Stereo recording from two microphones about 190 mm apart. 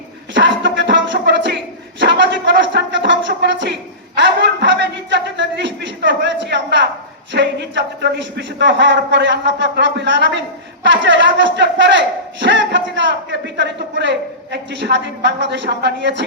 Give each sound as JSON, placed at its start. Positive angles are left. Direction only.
{"t": 0.3, "sound": "music", "side_deg": -75}
{"t": 2.0, "sound": "a sound", "side_deg": -70}
{"t": 7.3, "sound": "speech", "side_deg": -65}